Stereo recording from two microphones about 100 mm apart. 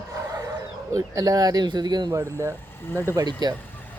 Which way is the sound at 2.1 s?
30° right (ahead or behind).